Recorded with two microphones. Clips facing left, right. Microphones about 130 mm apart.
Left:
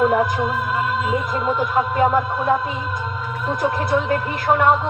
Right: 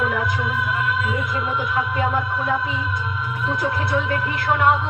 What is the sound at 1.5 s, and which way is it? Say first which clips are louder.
Speech: left 4 dB; 45° left (ahead or behind).